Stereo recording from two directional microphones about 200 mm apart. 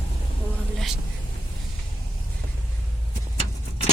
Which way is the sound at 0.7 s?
Centre (ahead or behind).